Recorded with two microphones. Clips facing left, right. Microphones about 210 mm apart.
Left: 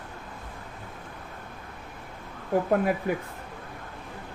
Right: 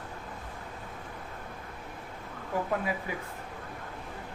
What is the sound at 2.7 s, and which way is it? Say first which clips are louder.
Speech: left 8 dB; 55° left (ahead or behind).